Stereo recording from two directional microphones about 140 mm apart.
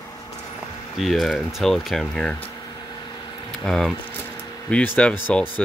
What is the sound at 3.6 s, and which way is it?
Speech, 5° left (ahead or behind).